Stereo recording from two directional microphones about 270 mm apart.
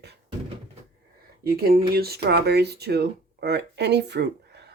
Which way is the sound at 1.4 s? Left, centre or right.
Right.